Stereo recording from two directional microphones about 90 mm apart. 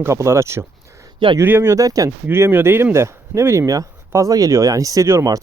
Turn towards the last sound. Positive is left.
turn(degrees=-40)  # may be behind; listen again after turning